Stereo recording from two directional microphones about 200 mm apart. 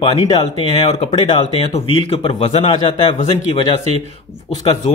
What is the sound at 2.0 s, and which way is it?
A man's voice, 25° left (ahead or behind).